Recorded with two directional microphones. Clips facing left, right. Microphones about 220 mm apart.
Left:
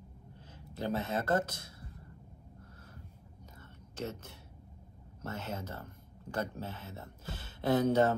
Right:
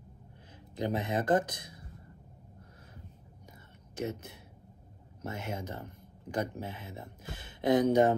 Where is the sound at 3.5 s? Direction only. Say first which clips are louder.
Right 4 dB; 10° right (ahead or behind).